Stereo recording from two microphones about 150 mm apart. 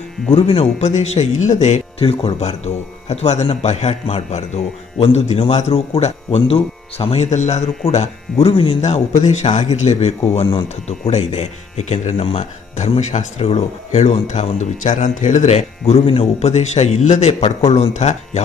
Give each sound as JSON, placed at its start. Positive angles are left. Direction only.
{"t": 0.3, "sound": "speech", "side_deg": 35}
{"t": 10.4, "sound": "speech", "side_deg": 30}
{"t": 10.9, "sound": "speech", "side_deg": 45}